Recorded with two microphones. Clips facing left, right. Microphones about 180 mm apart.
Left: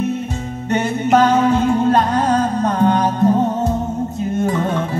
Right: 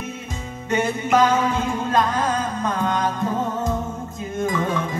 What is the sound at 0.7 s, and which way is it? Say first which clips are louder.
Music: left 4 dB; 65° left (ahead or behind).